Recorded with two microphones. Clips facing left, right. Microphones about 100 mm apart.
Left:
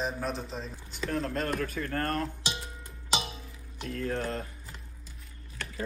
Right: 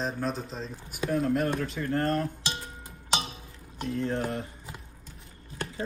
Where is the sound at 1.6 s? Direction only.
20° right (ahead or behind).